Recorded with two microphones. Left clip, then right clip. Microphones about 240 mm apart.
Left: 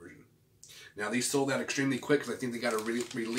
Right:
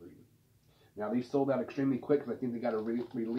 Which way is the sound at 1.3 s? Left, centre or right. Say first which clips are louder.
Right 1 dB; centre.